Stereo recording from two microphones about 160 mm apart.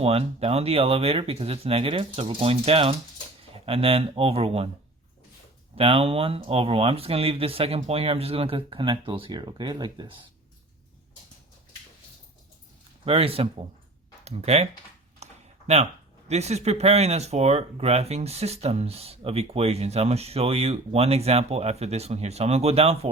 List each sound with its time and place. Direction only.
0.0 s speech: 40° right (ahead or behind)
5.7 s speech: 35° right (ahead or behind)
13.1 s speech: 35° right (ahead or behind)
15.2 s a sound: 45° right (ahead or behind)
16.3 s speech: 45° right (ahead or behind)